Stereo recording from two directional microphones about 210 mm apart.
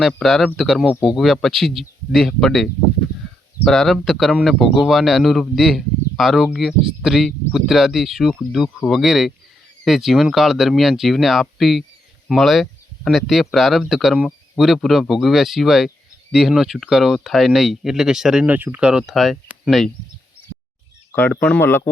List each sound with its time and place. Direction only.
0.0 s speech: centre (ahead or behind)
21.1 s speech: 10° left (ahead or behind)